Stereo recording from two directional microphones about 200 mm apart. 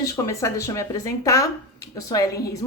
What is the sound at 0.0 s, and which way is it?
A woman's voice, 15° left (ahead or behind).